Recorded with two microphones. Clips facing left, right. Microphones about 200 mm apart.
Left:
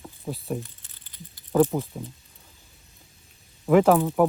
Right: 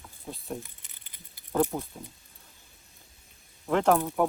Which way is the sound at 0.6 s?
15° right (ahead or behind).